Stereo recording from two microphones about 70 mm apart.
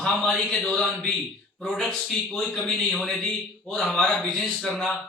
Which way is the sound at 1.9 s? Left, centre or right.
Centre.